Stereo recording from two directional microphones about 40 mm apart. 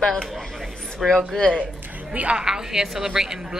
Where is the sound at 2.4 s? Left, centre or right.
Centre.